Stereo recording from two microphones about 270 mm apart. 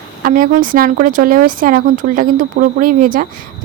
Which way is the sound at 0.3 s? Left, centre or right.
Right.